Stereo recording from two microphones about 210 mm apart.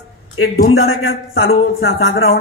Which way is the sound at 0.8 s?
80° left.